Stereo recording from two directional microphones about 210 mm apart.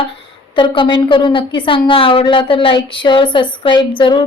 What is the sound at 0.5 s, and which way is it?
A woman's voice, 25° left (ahead or behind).